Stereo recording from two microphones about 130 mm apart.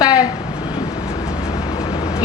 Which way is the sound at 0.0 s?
30° left (ahead or behind).